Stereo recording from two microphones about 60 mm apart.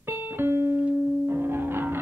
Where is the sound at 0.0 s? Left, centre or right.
Right.